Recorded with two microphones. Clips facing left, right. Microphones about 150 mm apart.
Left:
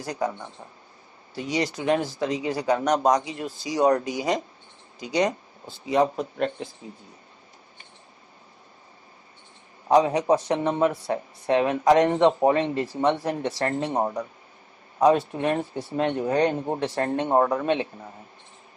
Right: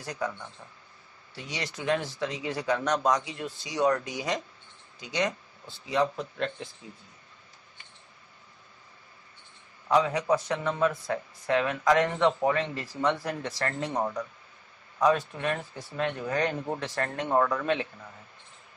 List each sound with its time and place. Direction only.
0.0 s speech: 35° left (ahead or behind)
6.3 s speech: 30° left (ahead or behind)
10.0 s speech: 30° left (ahead or behind)